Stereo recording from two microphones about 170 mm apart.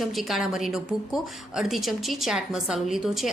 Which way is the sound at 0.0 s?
Centre (ahead or behind).